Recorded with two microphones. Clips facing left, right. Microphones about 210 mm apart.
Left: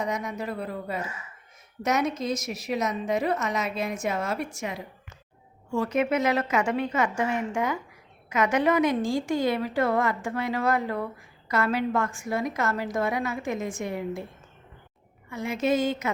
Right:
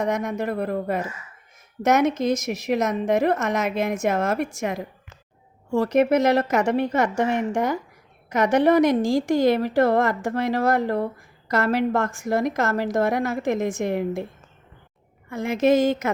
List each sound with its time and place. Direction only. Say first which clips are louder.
0.0 s a woman's voice: right 6 dB; 50° right (ahead or behind)
7.2 s a woman's voice: right 5 dB; 75° right (ahead or behind)
7.5 s a woman's voice: right 4 dB; 40° right (ahead or behind)
15.3 s a woman's voice: right 6 dB; 50° right (ahead or behind)